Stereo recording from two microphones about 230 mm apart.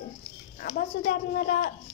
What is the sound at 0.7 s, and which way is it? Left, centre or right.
Speech, left.